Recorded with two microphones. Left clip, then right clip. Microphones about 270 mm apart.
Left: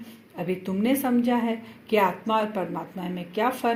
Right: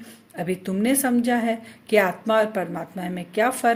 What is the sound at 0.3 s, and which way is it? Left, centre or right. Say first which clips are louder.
Speech: right 2 dB; right.